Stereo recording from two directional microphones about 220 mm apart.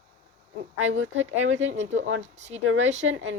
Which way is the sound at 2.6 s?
60° right (ahead or behind).